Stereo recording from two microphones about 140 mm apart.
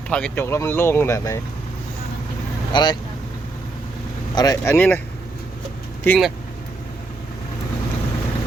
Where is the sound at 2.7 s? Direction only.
35° left (ahead or behind).